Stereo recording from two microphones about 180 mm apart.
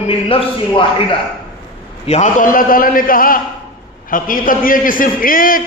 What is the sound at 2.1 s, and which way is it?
A man's voice, 45° left (ahead or behind).